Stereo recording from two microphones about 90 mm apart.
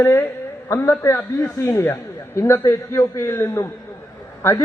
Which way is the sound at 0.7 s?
25° left (ahead or behind).